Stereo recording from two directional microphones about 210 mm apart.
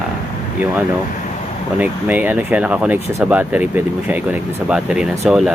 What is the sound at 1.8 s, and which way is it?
Speech, 10° right (ahead or behind).